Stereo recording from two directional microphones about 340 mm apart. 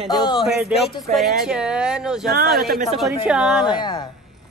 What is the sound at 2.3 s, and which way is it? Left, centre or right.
Speech, right.